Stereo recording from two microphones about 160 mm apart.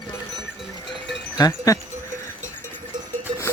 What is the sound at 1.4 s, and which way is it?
Speech, 20° left (ahead or behind).